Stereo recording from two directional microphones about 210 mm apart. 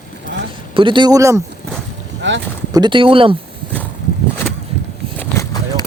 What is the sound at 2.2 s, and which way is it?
Speech, 60° right (ahead or behind).